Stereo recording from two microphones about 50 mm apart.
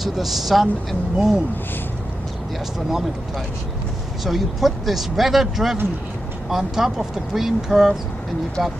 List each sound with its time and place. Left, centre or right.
0.0 s speech: centre
4.2 s speech: centre